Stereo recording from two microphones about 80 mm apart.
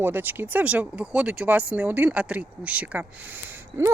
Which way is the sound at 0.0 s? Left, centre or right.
Right.